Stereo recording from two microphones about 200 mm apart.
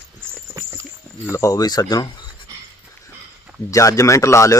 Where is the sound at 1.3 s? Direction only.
15° left (ahead or behind).